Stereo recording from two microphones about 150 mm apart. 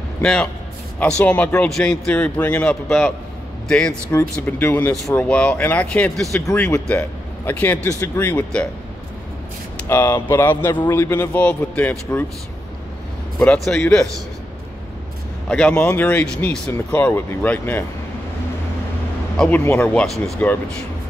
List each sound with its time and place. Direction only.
0.2 s a man's voice: 5° left (ahead or behind)
4.1 s a man's voice: 20° left (ahead or behind)
9.8 s a man's voice: 15° left (ahead or behind)
13.4 s speech: 5° left (ahead or behind)
15.4 s a man's voice: 5° left (ahead or behind)
16.7 s a man's voice: 15° left (ahead or behind)
19.3 s a man's voice: 5° left (ahead or behind)